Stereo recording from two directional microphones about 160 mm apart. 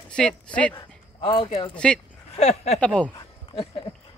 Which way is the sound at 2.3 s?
40° left (ahead or behind).